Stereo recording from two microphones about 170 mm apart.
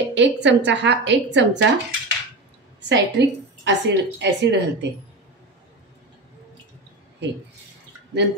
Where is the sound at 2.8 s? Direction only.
90° right.